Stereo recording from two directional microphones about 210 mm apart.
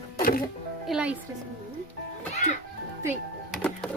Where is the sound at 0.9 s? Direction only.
5° right (ahead or behind).